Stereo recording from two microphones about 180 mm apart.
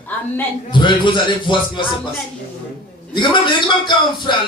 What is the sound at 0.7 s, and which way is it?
Speech, 25° left (ahead or behind).